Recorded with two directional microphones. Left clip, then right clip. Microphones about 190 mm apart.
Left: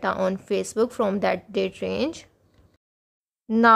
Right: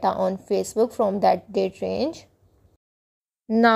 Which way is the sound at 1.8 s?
45° left (ahead or behind).